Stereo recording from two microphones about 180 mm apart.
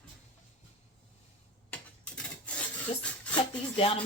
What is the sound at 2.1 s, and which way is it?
Filing, 5° left (ahead or behind).